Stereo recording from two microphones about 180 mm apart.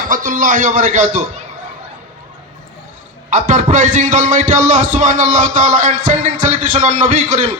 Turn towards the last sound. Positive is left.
turn(degrees=-45)  # may be behind; listen again after turning